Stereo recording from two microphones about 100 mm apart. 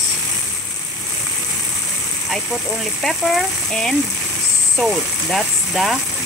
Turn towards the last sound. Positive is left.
turn(degrees=0)  # may be behind; listen again after turning